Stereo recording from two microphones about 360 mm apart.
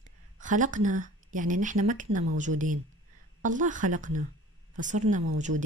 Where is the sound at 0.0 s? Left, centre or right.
Right.